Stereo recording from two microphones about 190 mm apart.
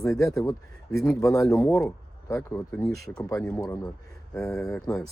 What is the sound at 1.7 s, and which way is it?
Speech, 15° left (ahead or behind).